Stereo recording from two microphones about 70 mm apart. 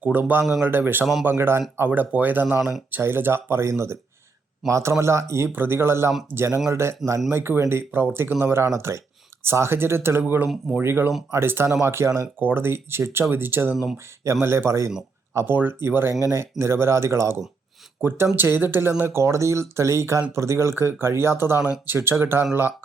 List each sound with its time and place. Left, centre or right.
0.0 s speech: right
12.4 s speech: right
15.5 s speech: right
18.0 s speech: right